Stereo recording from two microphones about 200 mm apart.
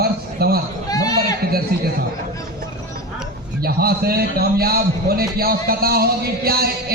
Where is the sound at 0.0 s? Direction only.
50° right (ahead or behind).